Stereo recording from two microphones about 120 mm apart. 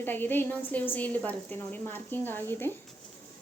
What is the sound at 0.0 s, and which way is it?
A woman's voice, 15° left (ahead or behind).